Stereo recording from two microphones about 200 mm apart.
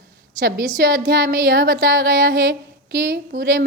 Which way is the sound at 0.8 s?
50° right (ahead or behind).